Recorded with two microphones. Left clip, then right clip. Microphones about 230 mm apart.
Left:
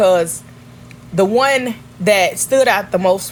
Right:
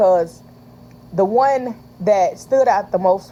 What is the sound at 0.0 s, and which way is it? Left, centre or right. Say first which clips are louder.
Speech: left 2 dB; left.